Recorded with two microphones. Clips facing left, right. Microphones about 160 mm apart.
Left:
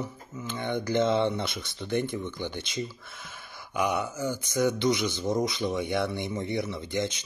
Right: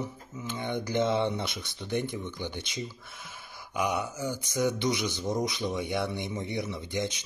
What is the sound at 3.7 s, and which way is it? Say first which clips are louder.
Speech: left 2 dB; 10° right (ahead or behind).